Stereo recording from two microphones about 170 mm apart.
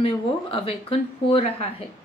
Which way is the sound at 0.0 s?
30° left (ahead or behind).